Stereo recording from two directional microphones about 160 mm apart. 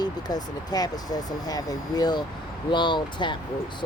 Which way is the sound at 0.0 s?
25° left (ahead or behind).